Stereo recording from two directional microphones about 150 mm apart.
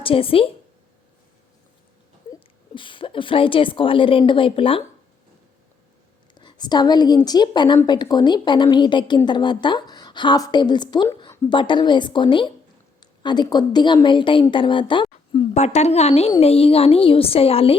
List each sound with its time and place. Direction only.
0.0 s a woman's voice: 35° left (ahead or behind)
2.3 s a woman's voice: 35° left (ahead or behind)
6.3 s a woman's voice: 30° left (ahead or behind)
15.5 s a woman's voice: 50° left (ahead or behind)